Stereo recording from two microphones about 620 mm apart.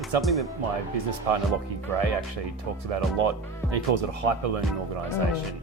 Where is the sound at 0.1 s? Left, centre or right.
Right.